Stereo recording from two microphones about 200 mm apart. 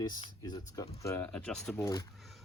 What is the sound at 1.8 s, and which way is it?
Speech, 20° left (ahead or behind).